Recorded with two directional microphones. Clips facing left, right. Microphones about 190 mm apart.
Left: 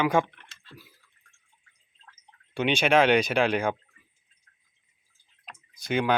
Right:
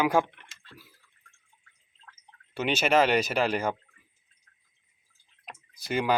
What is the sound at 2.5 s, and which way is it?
Speech, 5° right (ahead or behind).